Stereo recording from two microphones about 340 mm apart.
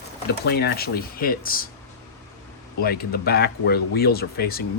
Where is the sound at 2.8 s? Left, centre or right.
Left.